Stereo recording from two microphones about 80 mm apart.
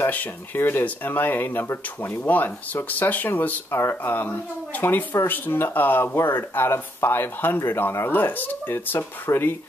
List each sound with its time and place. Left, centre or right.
0.0 s speech: left